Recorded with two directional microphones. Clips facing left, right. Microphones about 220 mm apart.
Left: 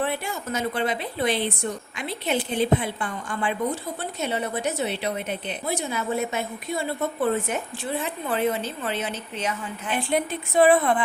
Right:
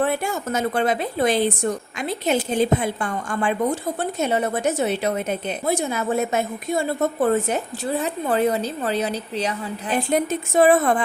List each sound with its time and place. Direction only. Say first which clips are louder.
0.0 s a woman's voice: right 5 dB; 45° right (ahead or behind)